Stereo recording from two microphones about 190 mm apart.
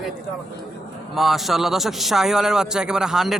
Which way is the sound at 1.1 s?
Centre (ahead or behind).